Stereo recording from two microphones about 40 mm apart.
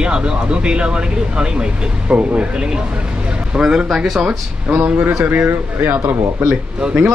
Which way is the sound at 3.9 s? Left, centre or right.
Centre.